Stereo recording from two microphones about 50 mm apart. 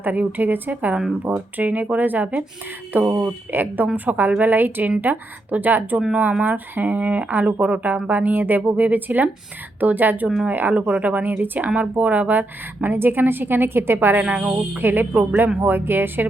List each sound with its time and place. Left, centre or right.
0.0 s speech: right
2.9 s a woman's voice: right
10.8 s a woman's voice: right
14.3 s speech: right
14.8 s a woman's voice: right